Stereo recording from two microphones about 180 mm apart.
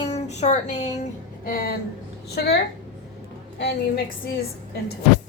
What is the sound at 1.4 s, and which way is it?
A woman's voice, 55° left (ahead or behind).